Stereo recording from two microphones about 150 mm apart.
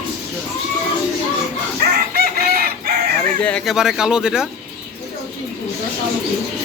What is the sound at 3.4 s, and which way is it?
Speech, 5° left (ahead or behind).